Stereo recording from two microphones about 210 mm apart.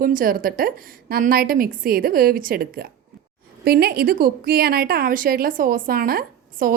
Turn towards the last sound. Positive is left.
turn(degrees=-45)  # may be behind; listen again after turning